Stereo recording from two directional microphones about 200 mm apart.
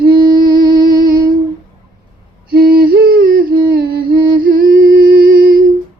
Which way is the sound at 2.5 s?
50° right (ahead or behind).